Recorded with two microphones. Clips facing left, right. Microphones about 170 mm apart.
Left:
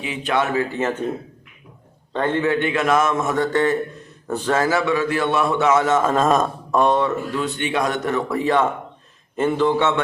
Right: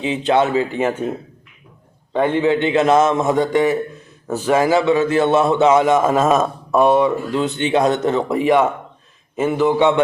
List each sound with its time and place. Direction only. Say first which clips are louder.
0.0 s a man's voice: right 6 dB; 25° right (ahead or behind)
2.1 s a man's voice: right 4 dB; 15° right (ahead or behind)
7.3 s a man's voice: right 5 dB; 20° right (ahead or behind)